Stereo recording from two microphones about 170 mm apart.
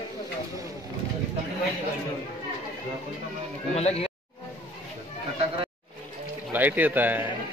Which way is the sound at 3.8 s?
40° left (ahead or behind).